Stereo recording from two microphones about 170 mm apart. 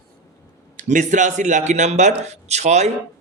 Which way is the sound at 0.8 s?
45° right (ahead or behind).